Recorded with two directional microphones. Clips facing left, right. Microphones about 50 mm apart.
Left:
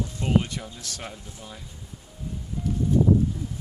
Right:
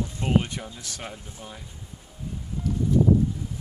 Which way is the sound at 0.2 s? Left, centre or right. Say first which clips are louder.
Even; right.